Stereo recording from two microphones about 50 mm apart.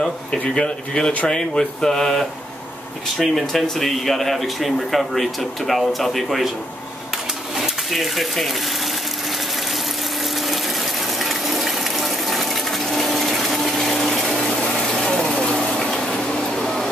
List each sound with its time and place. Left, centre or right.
0.6 s speech: centre
7.5 s speech: centre
11.1 s water: centre
12.8 s pump: centre
14.7 s a sound: centre